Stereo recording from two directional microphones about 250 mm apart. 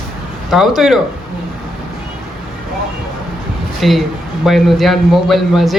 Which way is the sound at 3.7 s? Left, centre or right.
Centre.